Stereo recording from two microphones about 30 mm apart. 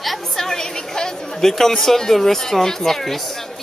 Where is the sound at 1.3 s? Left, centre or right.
Centre.